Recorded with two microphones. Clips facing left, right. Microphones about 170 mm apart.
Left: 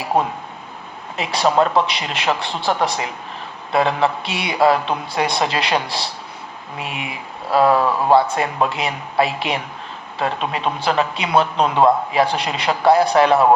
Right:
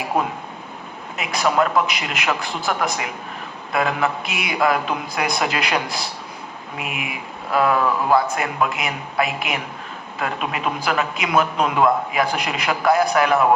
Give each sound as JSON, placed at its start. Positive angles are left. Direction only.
{"t": 0.1, "sound": "speech", "side_deg": 25}